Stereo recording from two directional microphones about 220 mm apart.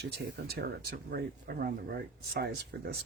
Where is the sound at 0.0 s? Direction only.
45° right (ahead or behind).